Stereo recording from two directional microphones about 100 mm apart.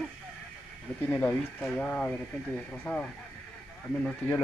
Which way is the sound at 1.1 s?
10° left (ahead or behind).